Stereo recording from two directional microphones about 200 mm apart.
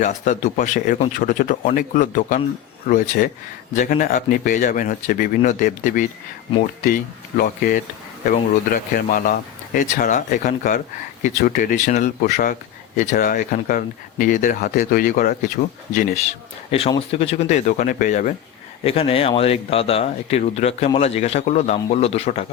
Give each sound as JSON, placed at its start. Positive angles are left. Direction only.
{"t": 0.0, "sound": "speech", "side_deg": 40}
{"t": 17.1, "sound": "speech", "side_deg": 30}
{"t": 18.9, "sound": "speech", "side_deg": 30}